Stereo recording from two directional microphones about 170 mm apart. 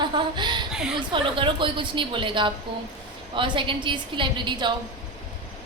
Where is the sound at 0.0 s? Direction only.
25° right (ahead or behind).